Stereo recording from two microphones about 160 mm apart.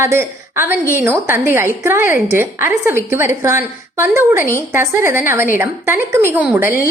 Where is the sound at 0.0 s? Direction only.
15° right (ahead or behind).